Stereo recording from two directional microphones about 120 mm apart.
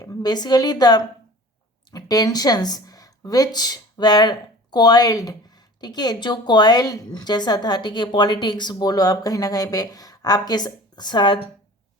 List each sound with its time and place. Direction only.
0.0 s a woman's voice: 30° left (ahead or behind)